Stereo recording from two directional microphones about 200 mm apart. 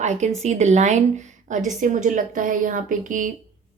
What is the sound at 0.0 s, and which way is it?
A woman's voice, 35° right (ahead or behind).